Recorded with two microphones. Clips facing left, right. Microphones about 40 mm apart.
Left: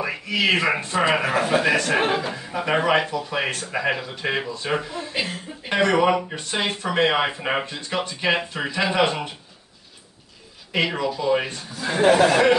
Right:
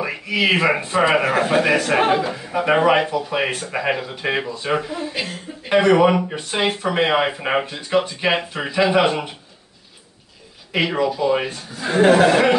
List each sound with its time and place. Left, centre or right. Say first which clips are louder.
0.0 s speech: right 2 dB; centre
5.1 s speech: even; centre
5.7 s speech: right 4 dB; centre
10.7 s speech: right 3 dB; centre
11.8 s speech: right 3 dB; right